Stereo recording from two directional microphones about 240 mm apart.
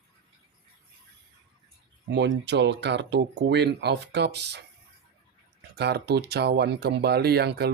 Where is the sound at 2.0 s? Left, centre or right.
Right.